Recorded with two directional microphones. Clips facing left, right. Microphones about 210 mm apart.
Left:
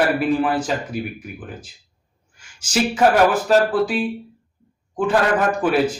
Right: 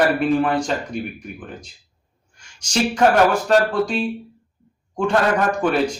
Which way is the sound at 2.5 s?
5° left (ahead or behind).